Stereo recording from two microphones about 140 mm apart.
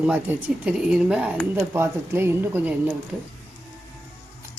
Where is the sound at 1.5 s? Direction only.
15° right (ahead or behind).